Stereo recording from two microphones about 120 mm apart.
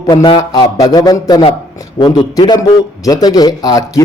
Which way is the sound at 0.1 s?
35° left (ahead or behind).